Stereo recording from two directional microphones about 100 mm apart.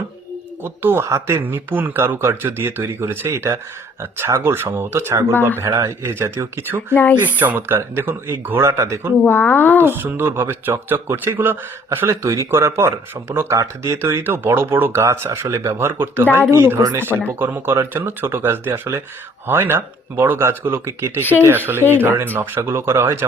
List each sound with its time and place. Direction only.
0.6 s speech: 20° right (ahead or behind); by 6.1 s 40° right (ahead or behind)
6.1 s speech: 25° right (ahead or behind)
6.9 s speech: 20° left (ahead or behind)
7.3 s speech: 15° right (ahead or behind)
9.2 s speech: 20° left (ahead or behind)
9.8 s speech: 20° right (ahead or behind)
21.2 s speech: 20° left (ahead or behind)
22.0 s speech: 20° right (ahead or behind)